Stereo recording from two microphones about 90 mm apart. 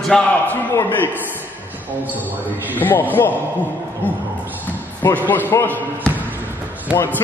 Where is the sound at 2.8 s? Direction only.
20° left (ahead or behind).